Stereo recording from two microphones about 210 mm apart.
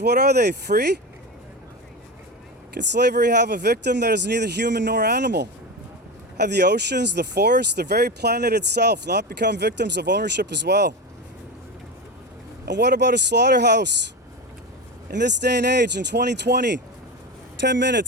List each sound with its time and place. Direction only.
0.0 s speech: 50° right (ahead or behind)
2.7 s speech: 55° right (ahead or behind)
12.6 s speech: 55° right (ahead or behind)
15.1 s speech: 55° right (ahead or behind)